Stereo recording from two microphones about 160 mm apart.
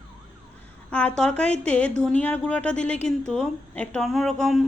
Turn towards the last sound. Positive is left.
turn(degrees=0)  # may be behind; listen again after turning